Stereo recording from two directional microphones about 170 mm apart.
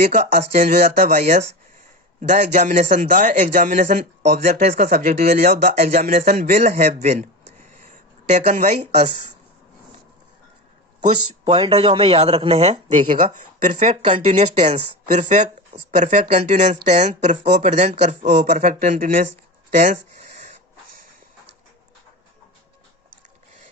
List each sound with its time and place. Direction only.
0.0 s speech: 45° right (ahead or behind)
11.4 s speech: 30° right (ahead or behind); by 19.3 s 50° right (ahead or behind)
19.7 s a sound: 45° right (ahead or behind)